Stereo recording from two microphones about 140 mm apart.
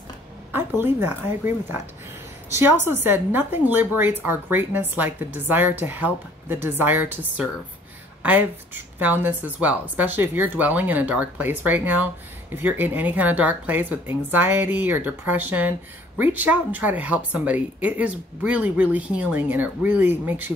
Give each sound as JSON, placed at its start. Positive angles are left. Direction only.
{"t": 0.5, "sound": "a woman's voice", "side_deg": -15}